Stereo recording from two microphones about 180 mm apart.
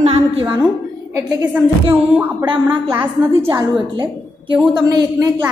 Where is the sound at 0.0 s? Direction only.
35° right (ahead or behind).